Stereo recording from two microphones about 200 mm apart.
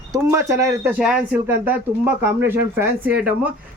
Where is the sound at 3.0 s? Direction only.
5° right (ahead or behind).